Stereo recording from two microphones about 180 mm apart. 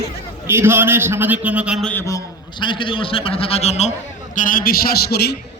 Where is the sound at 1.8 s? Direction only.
10° left (ahead or behind); by 3.9 s 35° left (ahead or behind).